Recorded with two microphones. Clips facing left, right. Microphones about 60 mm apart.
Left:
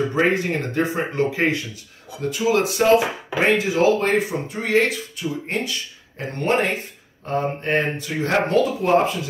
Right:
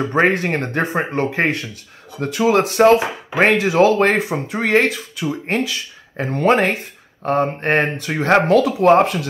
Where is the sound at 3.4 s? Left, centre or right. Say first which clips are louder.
Right 4 dB; right.